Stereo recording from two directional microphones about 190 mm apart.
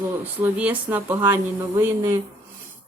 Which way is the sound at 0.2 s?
10° right (ahead or behind).